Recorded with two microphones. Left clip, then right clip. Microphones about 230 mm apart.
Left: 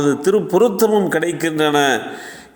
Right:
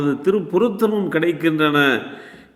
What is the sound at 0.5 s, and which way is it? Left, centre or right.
A man's voice, centre.